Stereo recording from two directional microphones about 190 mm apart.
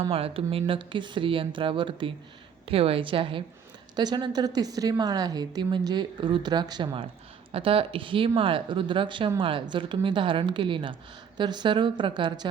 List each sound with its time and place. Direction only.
0.1 s a woman's voice: 30° right (ahead or behind)